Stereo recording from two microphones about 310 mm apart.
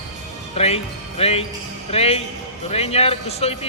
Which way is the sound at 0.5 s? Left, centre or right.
Centre.